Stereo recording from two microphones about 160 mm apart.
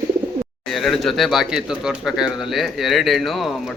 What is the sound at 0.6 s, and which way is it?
Speech, centre (ahead or behind).